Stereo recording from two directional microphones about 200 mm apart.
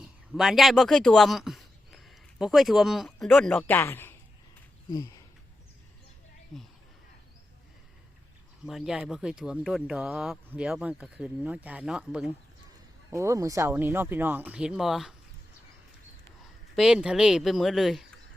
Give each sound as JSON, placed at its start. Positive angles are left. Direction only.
{"t": 0.0, "sound": "a man's voice", "side_deg": 0}
{"t": 4.9, "sound": "a sound", "side_deg": 15}
{"t": 8.6, "sound": "speech", "side_deg": 0}
{"t": 13.1, "sound": "speech", "side_deg": -15}
{"t": 16.7, "sound": "speech", "side_deg": -5}